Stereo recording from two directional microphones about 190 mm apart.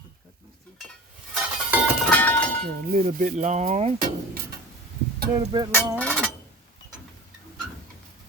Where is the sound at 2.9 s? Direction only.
45° right (ahead or behind).